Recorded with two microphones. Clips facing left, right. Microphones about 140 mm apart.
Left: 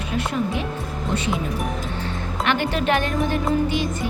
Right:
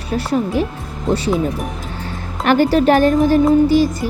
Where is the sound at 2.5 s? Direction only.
40° right (ahead or behind).